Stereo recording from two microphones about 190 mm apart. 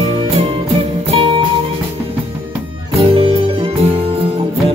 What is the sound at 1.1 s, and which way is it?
Music, 30° right (ahead or behind).